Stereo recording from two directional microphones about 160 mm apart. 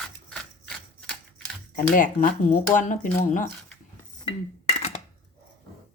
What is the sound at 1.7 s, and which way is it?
Speech, 55° left (ahead or behind).